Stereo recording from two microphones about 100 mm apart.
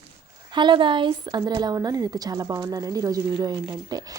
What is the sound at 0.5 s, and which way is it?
A woman's voice, 50° right (ahead or behind).